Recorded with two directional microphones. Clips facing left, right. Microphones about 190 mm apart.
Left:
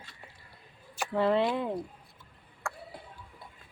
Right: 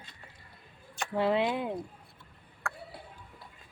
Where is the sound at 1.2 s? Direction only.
5° right (ahead or behind).